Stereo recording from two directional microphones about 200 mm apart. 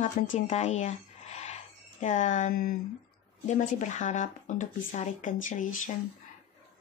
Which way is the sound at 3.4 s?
35° left (ahead or behind).